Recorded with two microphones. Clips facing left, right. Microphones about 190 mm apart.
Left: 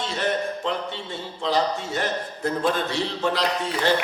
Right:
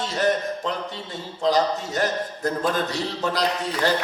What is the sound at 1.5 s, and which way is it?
A man's voice, 40° right (ahead or behind).